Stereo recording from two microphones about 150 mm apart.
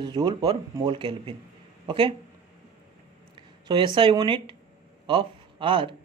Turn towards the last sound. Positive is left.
turn(degrees=-35)  # may be behind; listen again after turning